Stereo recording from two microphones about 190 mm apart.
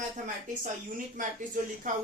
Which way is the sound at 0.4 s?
45° right (ahead or behind).